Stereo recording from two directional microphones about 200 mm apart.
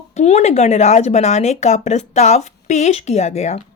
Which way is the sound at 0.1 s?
35° left (ahead or behind).